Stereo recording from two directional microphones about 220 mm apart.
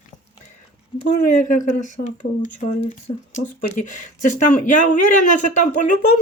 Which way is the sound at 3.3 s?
35° left (ahead or behind).